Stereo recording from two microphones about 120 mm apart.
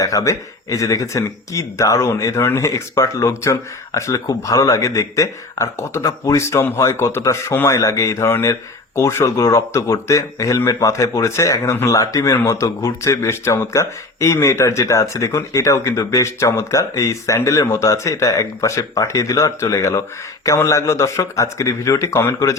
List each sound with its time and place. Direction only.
0.0 s speech: 30° left (ahead or behind)